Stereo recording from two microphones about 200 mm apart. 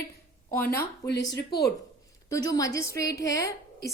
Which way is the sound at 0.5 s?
10° left (ahead or behind).